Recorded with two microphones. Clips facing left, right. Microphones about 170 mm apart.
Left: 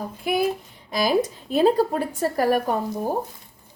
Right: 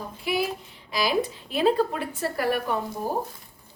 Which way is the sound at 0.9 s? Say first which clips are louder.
Left 4 dB; 45° left (ahead or behind).